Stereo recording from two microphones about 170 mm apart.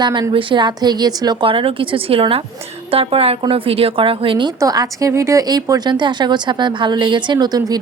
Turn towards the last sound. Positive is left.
turn(degrees=-25)  # may be behind; listen again after turning